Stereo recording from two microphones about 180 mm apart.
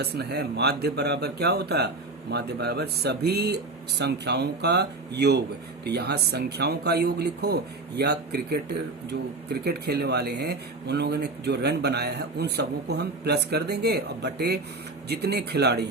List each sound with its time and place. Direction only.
0.0 s speech: 65° right (ahead or behind)